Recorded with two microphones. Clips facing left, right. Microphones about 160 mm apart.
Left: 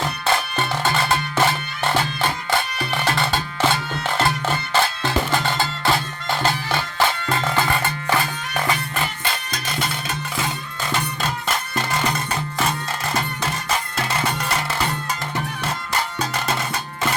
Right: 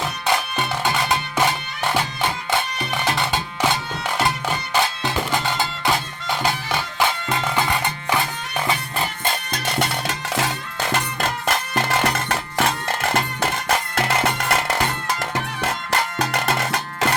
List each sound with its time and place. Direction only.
0.3 s music: 15° right (ahead or behind)
9.2 s music: 65° right (ahead or behind); by 10.9 s 80° right
10.9 s music: 55° right (ahead or behind)